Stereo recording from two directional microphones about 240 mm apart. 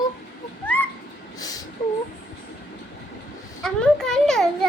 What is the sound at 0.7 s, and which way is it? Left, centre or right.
Owl, centre.